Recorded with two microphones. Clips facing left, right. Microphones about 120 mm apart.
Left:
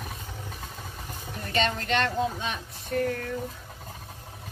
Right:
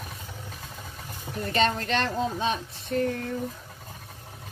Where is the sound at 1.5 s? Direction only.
35° right (ahead or behind).